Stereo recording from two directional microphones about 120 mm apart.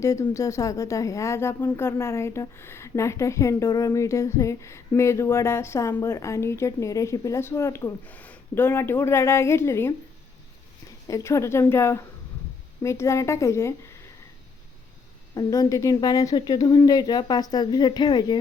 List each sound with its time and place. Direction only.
0.0 s speech: 25° left (ahead or behind)
11.1 s speech: 25° left (ahead or behind)
15.4 s speech: 30° left (ahead or behind)